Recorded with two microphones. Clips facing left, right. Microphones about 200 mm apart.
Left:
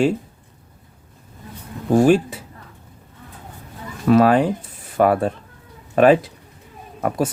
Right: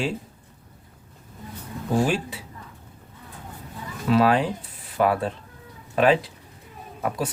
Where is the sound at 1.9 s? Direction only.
45° left (ahead or behind).